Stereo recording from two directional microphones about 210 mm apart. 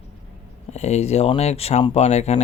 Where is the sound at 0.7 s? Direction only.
30° left (ahead or behind).